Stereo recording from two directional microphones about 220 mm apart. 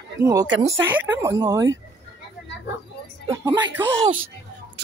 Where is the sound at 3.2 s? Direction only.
15° right (ahead or behind).